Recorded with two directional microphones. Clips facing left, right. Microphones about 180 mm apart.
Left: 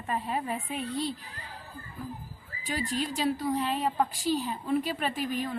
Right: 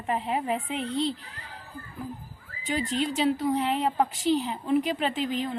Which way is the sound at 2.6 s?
20° right (ahead or behind).